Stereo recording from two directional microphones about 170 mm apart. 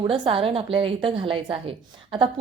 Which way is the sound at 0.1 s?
30° right (ahead or behind).